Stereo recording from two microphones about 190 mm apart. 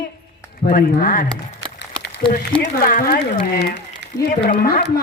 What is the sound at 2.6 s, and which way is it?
Speech, 50° left (ahead or behind).